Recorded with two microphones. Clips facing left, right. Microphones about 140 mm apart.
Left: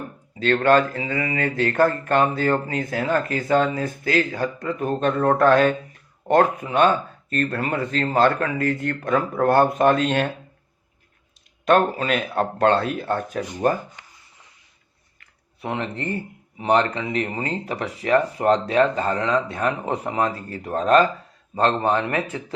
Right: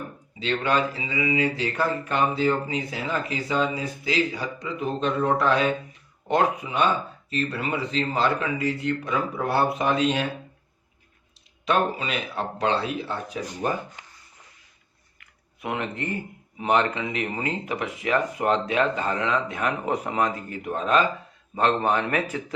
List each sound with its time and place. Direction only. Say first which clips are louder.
0.3 s speech: left 7 dB; 55° left (ahead or behind)
11.6 s speech: left 5 dB; 50° left (ahead or behind)
15.6 s speech: left 2 dB; 35° left (ahead or behind)
21.6 s speech: left 2 dB; 30° left (ahead or behind)